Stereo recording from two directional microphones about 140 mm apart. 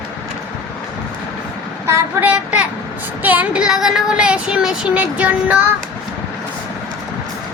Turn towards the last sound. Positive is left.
turn(degrees=-10)  # may be behind; listen again after turning